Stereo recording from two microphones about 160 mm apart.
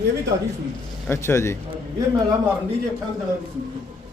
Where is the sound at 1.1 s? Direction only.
15° left (ahead or behind).